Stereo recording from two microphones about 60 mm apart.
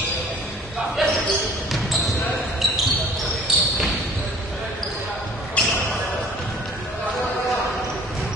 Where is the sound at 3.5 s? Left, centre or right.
Centre.